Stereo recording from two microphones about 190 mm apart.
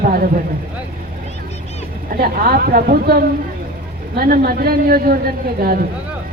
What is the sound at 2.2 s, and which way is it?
Speech, 50° right (ahead or behind).